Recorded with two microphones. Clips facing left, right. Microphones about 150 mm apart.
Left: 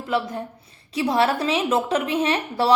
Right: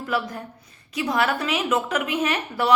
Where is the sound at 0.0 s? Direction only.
25° left (ahead or behind).